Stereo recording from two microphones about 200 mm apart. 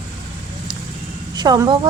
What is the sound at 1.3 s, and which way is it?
Speech, 20° right (ahead or behind).